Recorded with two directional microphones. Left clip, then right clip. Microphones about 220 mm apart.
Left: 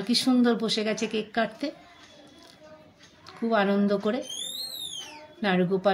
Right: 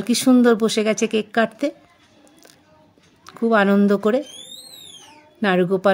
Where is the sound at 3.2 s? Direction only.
50° right (ahead or behind).